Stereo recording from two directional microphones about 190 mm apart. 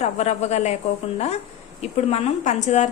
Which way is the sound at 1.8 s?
35° left (ahead or behind).